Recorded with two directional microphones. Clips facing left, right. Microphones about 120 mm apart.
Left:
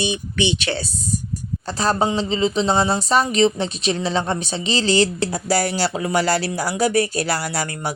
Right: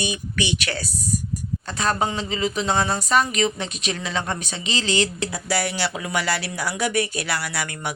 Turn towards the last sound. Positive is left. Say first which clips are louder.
# left 4 dB
turn(degrees=40)  # may be behind; listen again after turning